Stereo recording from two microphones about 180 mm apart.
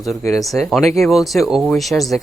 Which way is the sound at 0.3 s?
Centre (ahead or behind).